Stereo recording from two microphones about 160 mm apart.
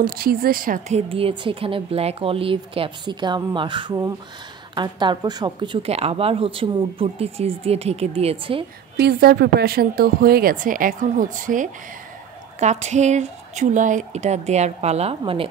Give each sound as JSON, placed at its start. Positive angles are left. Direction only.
{"t": 0.0, "sound": "a woman's voice", "side_deg": -70}
{"t": 8.9, "sound": "speech", "side_deg": -80}